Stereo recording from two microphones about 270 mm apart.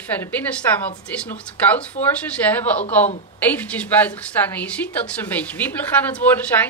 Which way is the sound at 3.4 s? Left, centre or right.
Centre.